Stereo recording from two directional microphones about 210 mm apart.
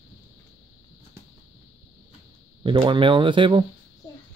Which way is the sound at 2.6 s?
25° right (ahead or behind).